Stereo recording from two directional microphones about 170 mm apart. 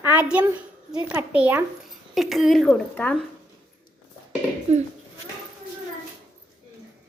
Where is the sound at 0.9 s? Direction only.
10° right (ahead or behind); by 3.2 s 5° left (ahead or behind).